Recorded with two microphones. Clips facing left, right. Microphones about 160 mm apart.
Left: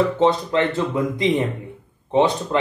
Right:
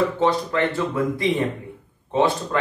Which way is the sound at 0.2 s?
25° left (ahead or behind).